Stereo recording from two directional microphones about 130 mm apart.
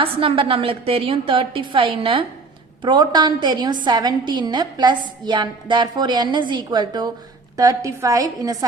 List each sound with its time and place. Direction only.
0.0 s a woman's voice: 45° right (ahead or behind); by 8.5 s 30° right (ahead or behind)